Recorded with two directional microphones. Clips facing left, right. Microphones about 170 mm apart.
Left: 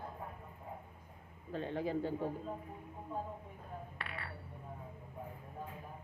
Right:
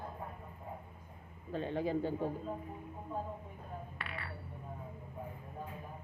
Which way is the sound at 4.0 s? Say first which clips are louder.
Right 1 dB; 40° left (ahead or behind).